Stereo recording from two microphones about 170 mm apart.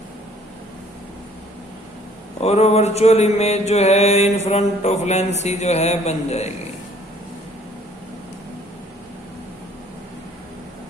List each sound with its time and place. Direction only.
2.4 s mantra: 40° left (ahead or behind)